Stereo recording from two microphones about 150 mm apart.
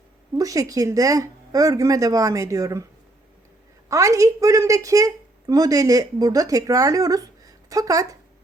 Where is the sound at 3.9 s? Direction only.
20° right (ahead or behind).